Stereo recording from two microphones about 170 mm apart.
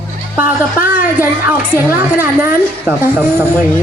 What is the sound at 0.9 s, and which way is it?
A woman's voice, 10° right (ahead or behind).